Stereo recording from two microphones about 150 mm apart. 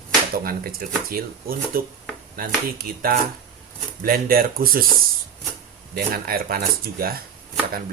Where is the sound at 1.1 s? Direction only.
75° right (ahead or behind).